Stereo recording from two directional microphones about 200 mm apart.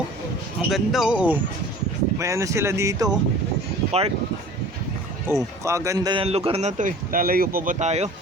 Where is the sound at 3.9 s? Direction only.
30° right (ahead or behind).